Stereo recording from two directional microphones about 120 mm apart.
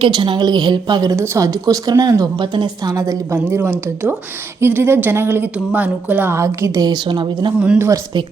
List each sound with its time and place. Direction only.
0.0 s speech: 45° right (ahead or behind)
1.1 s speech: 25° right (ahead or behind); by 2.9 s 40° right (ahead or behind)
2.9 s a woman's voice: 25° right (ahead or behind)
6.4 s speech: 25° right (ahead or behind)
7.6 s speech: 10° right (ahead or behind)